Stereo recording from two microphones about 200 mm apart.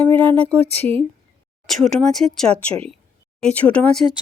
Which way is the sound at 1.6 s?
Centre (ahead or behind).